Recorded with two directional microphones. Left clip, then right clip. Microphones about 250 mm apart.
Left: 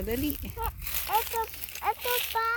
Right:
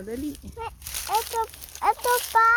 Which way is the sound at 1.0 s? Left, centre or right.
Right.